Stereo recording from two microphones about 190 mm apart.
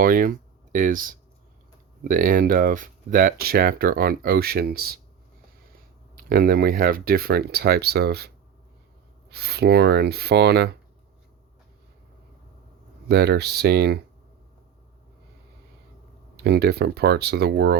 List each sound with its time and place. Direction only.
0.0 s speech: 45° right (ahead or behind)
9.3 s speech: 55° right (ahead or behind)
13.1 s speech: 55° right (ahead or behind)
16.4 s speech: 55° right (ahead or behind)